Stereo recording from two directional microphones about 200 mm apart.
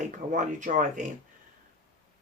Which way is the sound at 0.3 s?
40° right (ahead or behind).